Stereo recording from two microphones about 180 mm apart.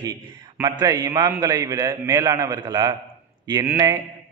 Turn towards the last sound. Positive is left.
turn(degrees=-20)  # may be behind; listen again after turning